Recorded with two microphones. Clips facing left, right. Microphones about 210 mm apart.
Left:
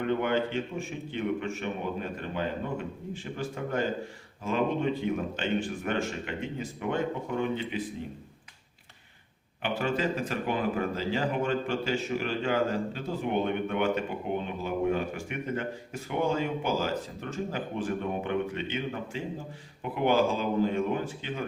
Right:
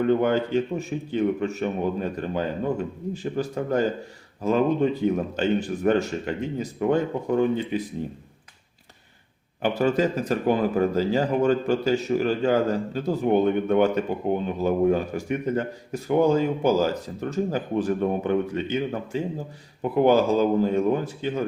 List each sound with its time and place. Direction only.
0.0 s speech: 40° right (ahead or behind)
9.6 s speech: 40° right (ahead or behind)